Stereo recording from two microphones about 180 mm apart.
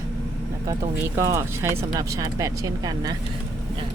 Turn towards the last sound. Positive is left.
turn(degrees=-20)  # may be behind; listen again after turning